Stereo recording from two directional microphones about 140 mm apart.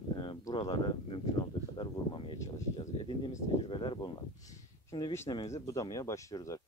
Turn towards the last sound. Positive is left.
turn(degrees=20)  # may be behind; listen again after turning